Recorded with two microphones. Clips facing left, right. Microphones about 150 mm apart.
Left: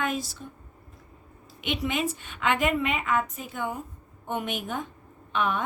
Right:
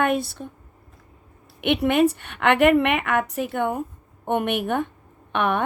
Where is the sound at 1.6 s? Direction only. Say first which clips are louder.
Right 10 dB; 60° right (ahead or behind).